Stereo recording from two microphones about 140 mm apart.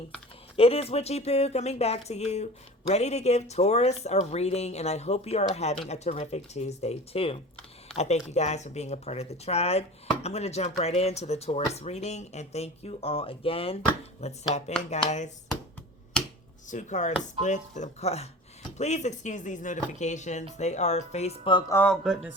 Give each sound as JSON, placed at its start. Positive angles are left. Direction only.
{"t": 0.5, "sound": "speech", "side_deg": 45}
{"t": 14.5, "sound": "speech", "side_deg": 55}
{"t": 16.6, "sound": "speech", "side_deg": 60}
{"t": 21.7, "sound": "speech", "side_deg": 15}
{"t": 22.0, "sound": "speech", "side_deg": -5}